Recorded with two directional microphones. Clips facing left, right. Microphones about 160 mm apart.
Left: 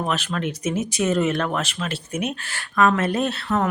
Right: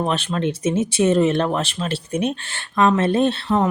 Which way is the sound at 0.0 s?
30° right (ahead or behind).